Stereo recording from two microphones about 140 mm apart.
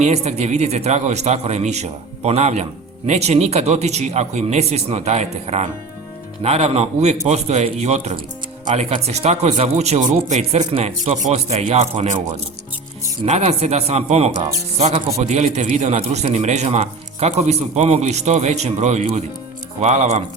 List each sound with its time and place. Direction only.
0.0 s a man's voice: 55° right (ahead or behind)
13.2 s a man's voice: 50° right (ahead or behind)